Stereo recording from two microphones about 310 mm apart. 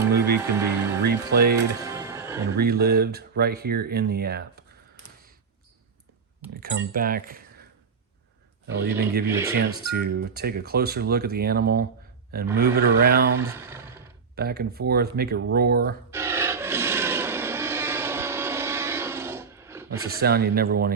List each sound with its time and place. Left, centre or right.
0.3 s speech: centre
1.0 s speech: right
1.8 s music: centre
2.6 s speech: right
6.5 s speech: right
8.6 s speech: right
9.2 s speech: centre
9.6 s speech: right
13.5 s a sound: centre
14.3 s speech: right
16.0 s rub: centre
20.1 s speech: right